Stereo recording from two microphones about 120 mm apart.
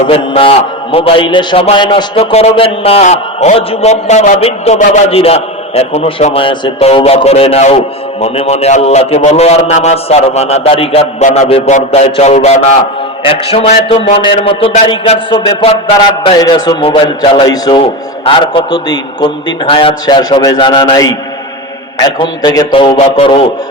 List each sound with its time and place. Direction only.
0.1 s a man's voice: 50° left (ahead or behind)
2.1 s a man's voice: 55° left (ahead or behind)
6.8 s a man's voice: 55° left (ahead or behind)
11.2 s a man's voice: 90° left
11.4 s a man's voice: 55° left (ahead or behind)
11.7 s a man's voice: 65° left (ahead or behind)
13.2 s a man's voice: 50° left (ahead or behind)
16.2 s a man's voice: 35° left (ahead or behind)
22.4 s a man's voice: 35° left (ahead or behind)
23.0 s a man's voice: 50° left (ahead or behind)